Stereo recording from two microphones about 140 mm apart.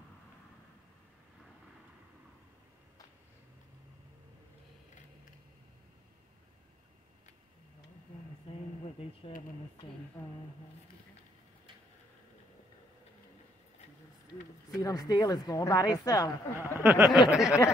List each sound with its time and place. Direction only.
14.8 s speech: 25° left (ahead or behind)
16.5 s speech: 15° right (ahead or behind)
17.3 s speech: 5° right (ahead or behind)